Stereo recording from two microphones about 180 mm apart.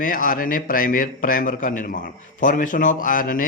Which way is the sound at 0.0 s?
50° left (ahead or behind).